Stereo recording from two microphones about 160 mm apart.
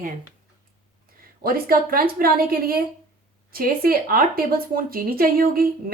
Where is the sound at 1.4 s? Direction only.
65° right (ahead or behind).